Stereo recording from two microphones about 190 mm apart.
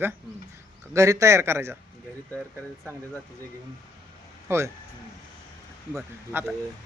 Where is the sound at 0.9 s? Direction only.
15° right (ahead or behind).